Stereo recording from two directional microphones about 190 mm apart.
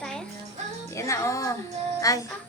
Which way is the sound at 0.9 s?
15° left (ahead or behind).